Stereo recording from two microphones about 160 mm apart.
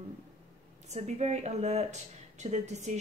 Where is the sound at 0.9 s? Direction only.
45° right (ahead or behind).